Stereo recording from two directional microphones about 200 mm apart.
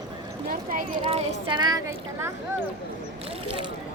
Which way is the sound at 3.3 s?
30° right (ahead or behind).